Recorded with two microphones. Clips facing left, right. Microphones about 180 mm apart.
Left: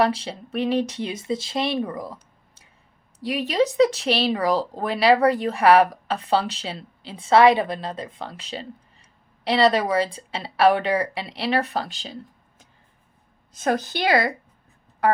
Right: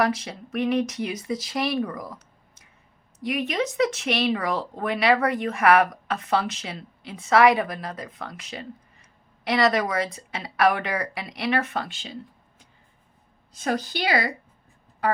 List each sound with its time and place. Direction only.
0.0 s a woman's voice: 30° left (ahead or behind)
13.6 s speech: 50° left (ahead or behind)